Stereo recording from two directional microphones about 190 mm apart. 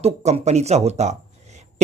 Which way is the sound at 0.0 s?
35° right (ahead or behind).